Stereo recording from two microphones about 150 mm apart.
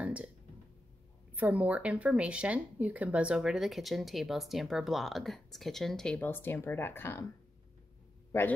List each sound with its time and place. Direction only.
0.0 s a sound: 10° right (ahead or behind)
1.3 s speech: 10° right (ahead or behind); by 7.2 s 15° left (ahead or behind)
8.3 s a man's voice: 20° left (ahead or behind)